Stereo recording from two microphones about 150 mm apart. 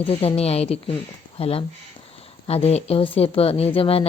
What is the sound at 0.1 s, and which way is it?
A woman's voice, 40° left (ahead or behind).